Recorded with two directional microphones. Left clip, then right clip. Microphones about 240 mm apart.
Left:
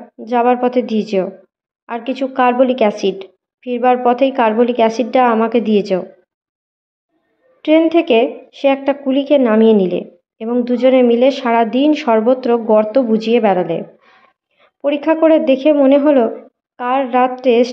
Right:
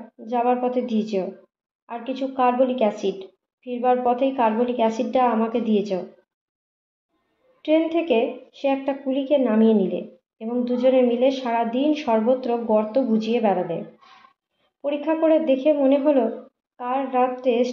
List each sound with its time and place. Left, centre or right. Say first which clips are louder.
0.2 s a woman's voice: left 8 dB; left
7.6 s a woman's voice: left 9 dB; left